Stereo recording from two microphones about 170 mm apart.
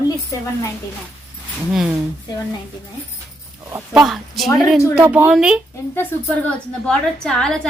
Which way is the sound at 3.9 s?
Centre (ahead or behind).